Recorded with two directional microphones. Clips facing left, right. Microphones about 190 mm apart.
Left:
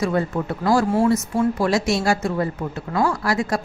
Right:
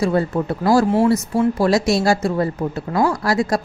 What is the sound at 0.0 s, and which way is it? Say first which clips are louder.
Speech: right 3 dB; 35° right (ahead or behind).